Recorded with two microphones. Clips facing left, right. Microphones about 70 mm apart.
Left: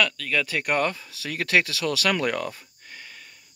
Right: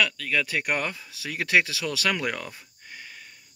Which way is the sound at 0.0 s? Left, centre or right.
Centre.